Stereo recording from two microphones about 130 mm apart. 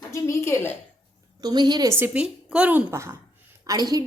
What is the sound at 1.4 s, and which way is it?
Speech, 30° right (ahead or behind).